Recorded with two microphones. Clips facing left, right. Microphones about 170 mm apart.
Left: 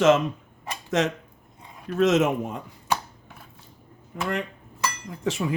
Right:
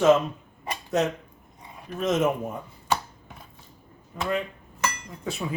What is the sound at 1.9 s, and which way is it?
Speech, 85° left.